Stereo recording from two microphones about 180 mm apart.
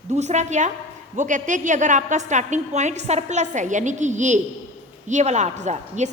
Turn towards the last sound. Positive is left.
turn(degrees=-40)  # may be behind; listen again after turning